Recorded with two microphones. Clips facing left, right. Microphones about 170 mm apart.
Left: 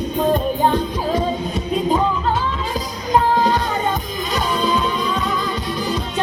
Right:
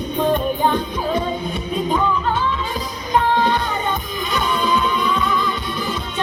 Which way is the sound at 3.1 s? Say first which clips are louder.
Left 1 dB; 40° left (ahead or behind).